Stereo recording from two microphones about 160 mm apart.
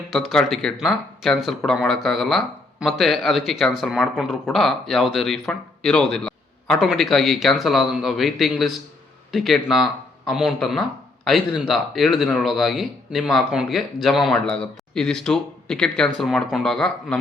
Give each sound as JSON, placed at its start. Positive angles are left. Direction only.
{"t": 0.1, "sound": "speech", "side_deg": 0}